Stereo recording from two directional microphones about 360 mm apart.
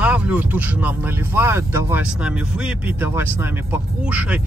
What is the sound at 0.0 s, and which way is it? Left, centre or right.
Speech, centre.